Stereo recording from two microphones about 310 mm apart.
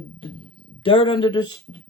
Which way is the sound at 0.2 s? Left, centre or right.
Centre.